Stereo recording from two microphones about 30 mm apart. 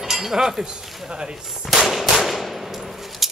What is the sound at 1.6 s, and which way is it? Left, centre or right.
Machine gun, centre.